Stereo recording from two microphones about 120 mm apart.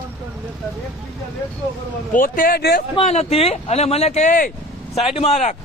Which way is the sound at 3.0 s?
60° left (ahead or behind).